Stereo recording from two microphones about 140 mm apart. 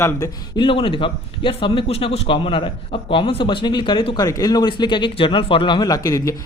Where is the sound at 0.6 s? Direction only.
40° left (ahead or behind).